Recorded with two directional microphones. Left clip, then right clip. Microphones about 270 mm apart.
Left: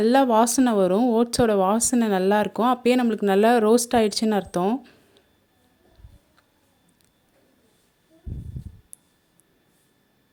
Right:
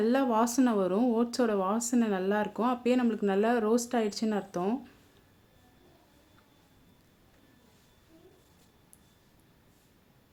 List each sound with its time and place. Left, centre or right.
0.0 s speech: left